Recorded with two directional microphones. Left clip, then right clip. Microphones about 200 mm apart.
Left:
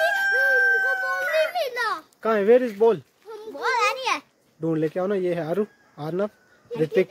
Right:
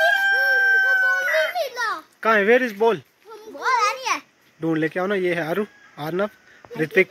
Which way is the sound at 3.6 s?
35° left (ahead or behind).